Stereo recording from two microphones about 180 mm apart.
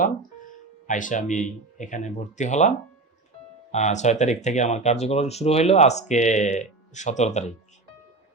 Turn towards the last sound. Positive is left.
turn(degrees=40)  # may be behind; listen again after turning